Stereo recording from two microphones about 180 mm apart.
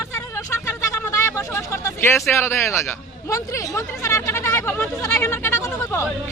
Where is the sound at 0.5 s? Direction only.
15° left (ahead or behind).